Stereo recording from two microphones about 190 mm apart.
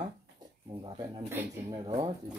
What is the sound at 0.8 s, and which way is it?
Speech, 25° right (ahead or behind).